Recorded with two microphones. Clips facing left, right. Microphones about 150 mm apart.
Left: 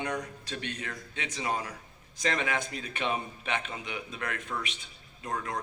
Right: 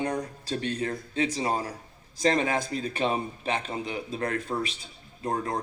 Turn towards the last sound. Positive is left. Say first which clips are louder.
# right 5 dB
turn(degrees=-35)  # may be behind; listen again after turning